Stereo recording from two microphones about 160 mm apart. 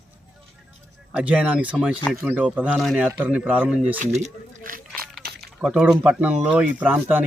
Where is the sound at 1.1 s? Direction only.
5° right (ahead or behind).